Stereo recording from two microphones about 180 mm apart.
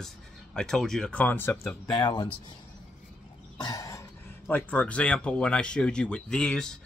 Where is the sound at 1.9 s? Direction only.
25° left (ahead or behind).